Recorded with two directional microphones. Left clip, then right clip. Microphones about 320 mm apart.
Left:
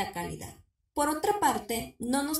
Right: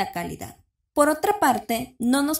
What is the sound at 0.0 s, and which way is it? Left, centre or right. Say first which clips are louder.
Speech: right 6 dB; right.